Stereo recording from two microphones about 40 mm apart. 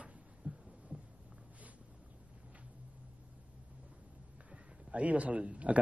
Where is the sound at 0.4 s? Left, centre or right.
Centre.